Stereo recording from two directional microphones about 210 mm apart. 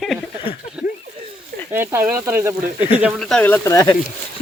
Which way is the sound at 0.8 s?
5° right (ahead or behind).